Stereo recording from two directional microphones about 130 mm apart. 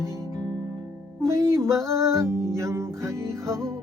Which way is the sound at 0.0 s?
30° left (ahead or behind).